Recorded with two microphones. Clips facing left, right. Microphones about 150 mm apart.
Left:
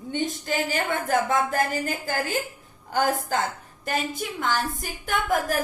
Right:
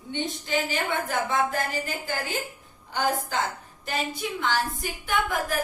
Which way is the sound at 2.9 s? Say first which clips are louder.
Left 3 dB; 50° left (ahead or behind).